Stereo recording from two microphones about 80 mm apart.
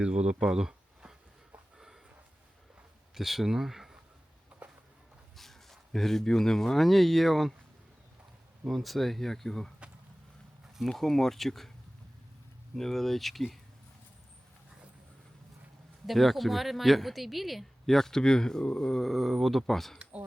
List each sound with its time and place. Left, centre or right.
0.0 s speech: centre
3.2 s speech: centre
5.4 s speech: centre
8.6 s speech: centre
10.8 s speech: centre
12.7 s speech: centre
16.0 s speech: centre